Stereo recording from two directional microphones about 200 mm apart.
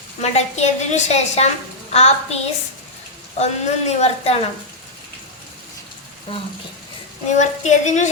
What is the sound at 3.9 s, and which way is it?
Speech, 30° left (ahead or behind).